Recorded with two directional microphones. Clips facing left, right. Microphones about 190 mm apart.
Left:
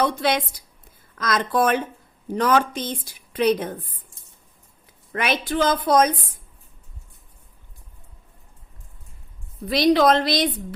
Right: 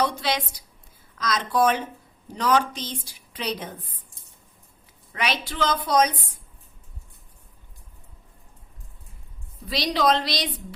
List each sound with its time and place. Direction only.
0.0 s a woman's voice: 55° left (ahead or behind)
5.1 s a woman's voice: 50° left (ahead or behind)
9.6 s a woman's voice: 55° left (ahead or behind)